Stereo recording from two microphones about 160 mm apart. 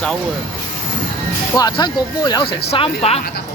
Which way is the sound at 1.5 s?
25° left (ahead or behind).